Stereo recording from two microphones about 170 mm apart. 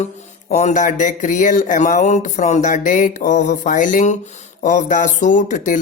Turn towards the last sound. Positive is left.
turn(degrees=50)  # may be behind; listen again after turning